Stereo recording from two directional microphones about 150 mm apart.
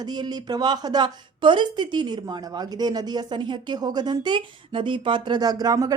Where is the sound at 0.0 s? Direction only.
30° right (ahead or behind).